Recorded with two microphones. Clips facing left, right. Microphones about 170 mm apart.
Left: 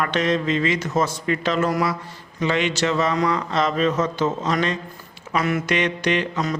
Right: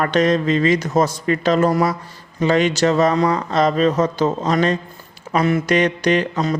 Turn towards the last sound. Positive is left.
turn(degrees=-35)  # may be behind; listen again after turning